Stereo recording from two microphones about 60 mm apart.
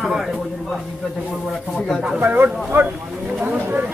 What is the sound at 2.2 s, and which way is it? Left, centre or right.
Speech, right.